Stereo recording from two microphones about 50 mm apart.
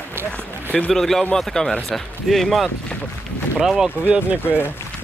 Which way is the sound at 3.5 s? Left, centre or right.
Centre.